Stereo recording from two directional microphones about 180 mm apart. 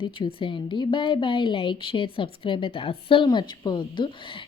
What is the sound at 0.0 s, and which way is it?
A woman's voice, 30° left (ahead or behind).